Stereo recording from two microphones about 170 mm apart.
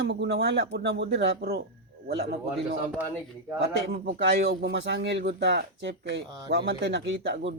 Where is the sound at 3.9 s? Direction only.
70° right (ahead or behind).